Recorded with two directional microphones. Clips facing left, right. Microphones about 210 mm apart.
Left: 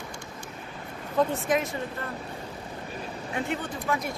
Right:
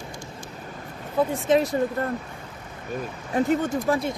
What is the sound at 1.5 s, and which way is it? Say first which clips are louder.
Speech: right 6 dB; 35° right (ahead or behind).